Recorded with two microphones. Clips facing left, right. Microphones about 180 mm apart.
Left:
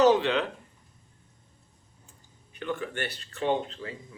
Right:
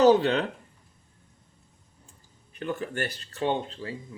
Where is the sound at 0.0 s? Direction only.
40° right (ahead or behind).